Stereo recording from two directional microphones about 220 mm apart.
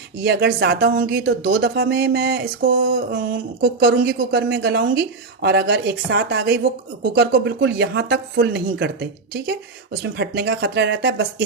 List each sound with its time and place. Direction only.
0.3 s speech: 50° right (ahead or behind)